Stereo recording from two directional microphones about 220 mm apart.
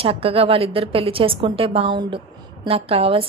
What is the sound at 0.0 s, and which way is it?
A woman's voice, 25° right (ahead or behind).